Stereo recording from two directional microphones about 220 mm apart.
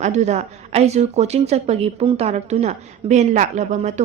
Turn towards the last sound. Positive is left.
turn(degrees=-35)  # may be behind; listen again after turning